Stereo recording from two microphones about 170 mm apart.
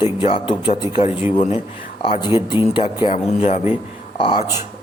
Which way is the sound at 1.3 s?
45° left (ahead or behind).